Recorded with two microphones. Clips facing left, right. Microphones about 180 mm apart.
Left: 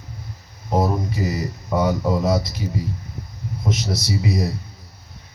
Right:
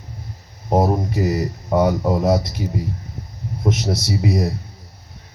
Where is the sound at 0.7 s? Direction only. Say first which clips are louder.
Right 3 dB; 55° right (ahead or behind).